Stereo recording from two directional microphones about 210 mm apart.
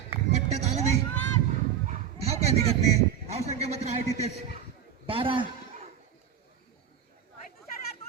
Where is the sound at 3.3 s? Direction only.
30° right (ahead or behind).